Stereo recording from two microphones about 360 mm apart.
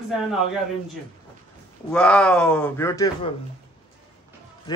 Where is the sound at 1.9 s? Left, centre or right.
Centre.